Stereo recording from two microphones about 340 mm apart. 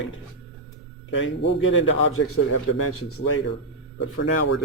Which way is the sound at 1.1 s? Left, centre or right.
Left.